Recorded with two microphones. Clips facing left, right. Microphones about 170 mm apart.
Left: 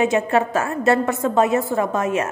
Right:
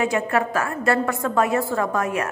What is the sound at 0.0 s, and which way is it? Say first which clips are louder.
A woman's voice: left 3 dB; 25° left (ahead or behind).